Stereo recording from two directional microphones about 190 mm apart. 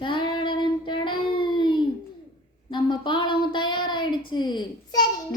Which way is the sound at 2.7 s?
25° left (ahead or behind).